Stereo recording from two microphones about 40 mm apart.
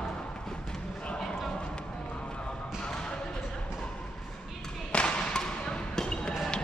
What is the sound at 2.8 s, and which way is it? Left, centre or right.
Basketball bounce, left.